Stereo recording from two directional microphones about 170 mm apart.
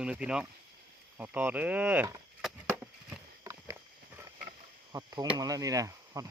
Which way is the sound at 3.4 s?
20° right (ahead or behind).